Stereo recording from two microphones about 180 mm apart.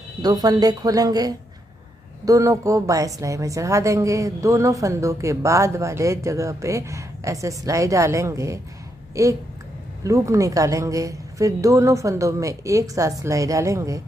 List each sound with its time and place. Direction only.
0.2 s a woman's voice: 20° right (ahead or behind)